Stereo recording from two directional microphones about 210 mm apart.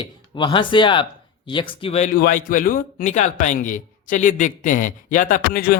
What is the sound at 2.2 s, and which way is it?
Speech, 40° left (ahead or behind).